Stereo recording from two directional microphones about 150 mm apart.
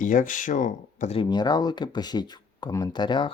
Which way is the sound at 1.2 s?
30° left (ahead or behind).